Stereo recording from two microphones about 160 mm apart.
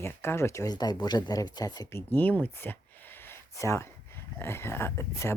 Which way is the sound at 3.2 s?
15° left (ahead or behind).